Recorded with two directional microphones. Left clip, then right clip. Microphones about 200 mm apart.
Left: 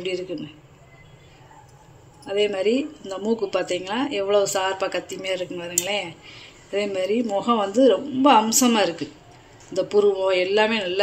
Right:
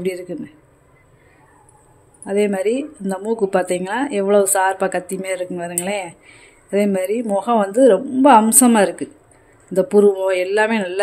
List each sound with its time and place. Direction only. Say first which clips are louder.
0.0 s a woman's voice: right 3 dB; 60° right (ahead or behind)
2.2 s a woman's voice: right 3 dB; 55° right (ahead or behind)